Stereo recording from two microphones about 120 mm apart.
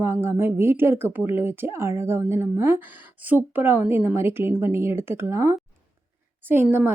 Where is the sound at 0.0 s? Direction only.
20° right (ahead or behind).